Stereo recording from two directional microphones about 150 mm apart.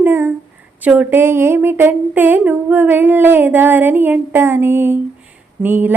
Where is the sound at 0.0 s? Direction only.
15° right (ahead or behind).